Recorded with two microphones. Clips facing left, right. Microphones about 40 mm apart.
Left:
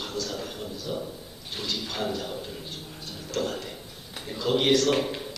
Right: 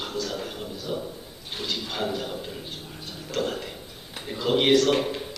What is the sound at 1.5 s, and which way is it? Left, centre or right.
Bird, centre.